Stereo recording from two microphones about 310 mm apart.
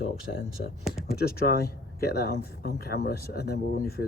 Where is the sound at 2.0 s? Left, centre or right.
Left.